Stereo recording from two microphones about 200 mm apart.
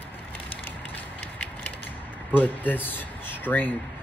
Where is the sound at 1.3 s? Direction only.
10° left (ahead or behind).